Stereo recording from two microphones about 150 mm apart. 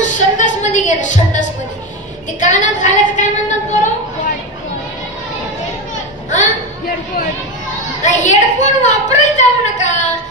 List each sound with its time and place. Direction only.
0.0 s a sound: 55° left (ahead or behind)
2.4 s a woman's voice: 55° left (ahead or behind)
8.0 s a woman's voice: 55° left (ahead or behind)